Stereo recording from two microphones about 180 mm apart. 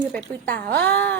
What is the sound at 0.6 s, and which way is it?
Speech, 60° right (ahead or behind).